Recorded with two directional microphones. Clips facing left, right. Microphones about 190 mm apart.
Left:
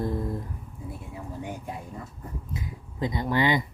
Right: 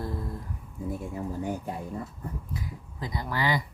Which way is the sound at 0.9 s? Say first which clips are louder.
Right 6 dB; 45° right (ahead or behind).